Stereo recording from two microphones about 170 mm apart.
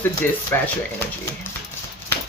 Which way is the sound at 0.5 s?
10° left (ahead or behind).